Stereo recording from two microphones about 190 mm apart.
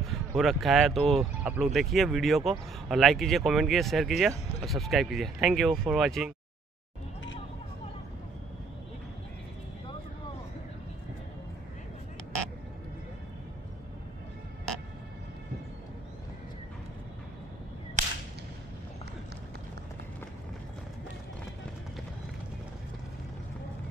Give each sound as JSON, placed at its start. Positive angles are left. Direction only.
{"t": 0.4, "sound": "speech", "side_deg": 0}
{"t": 18.0, "sound": "whip", "side_deg": -40}